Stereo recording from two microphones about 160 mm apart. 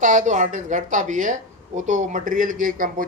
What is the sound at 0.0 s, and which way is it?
Speech, 50° right (ahead or behind).